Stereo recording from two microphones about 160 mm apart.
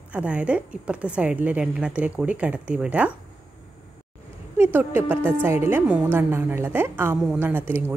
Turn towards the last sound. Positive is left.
turn(degrees=-15)  # may be behind; listen again after turning